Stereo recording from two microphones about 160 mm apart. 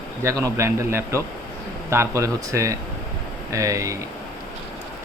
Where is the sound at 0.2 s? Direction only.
20° right (ahead or behind).